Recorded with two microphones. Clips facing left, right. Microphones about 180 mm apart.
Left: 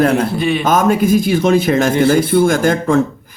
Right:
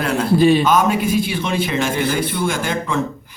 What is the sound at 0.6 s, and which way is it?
A man's voice, 45° left (ahead or behind).